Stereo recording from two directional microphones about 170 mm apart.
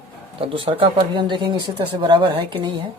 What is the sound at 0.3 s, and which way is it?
Speech, 30° right (ahead or behind).